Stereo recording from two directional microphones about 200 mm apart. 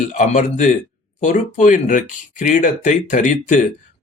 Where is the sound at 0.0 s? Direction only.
40° left (ahead or behind).